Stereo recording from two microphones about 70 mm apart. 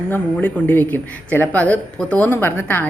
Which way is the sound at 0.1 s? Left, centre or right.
Left.